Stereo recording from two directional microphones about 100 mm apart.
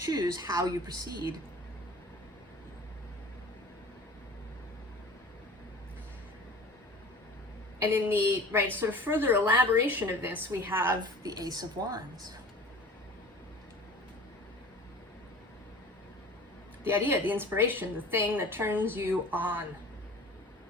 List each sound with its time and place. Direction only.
0.0 s a woman's voice: 40° right (ahead or behind)
7.8 s a woman's voice: 20° right (ahead or behind)
11.2 s a woman's voice: 40° right (ahead or behind)
16.8 s a woman's voice: 20° right (ahead or behind)